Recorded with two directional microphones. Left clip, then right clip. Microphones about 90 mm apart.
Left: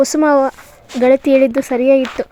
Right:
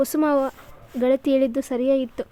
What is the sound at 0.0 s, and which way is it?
Speech, 35° left (ahead or behind).